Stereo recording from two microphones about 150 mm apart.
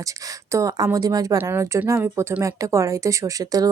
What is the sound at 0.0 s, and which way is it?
Speech, 20° right (ahead or behind).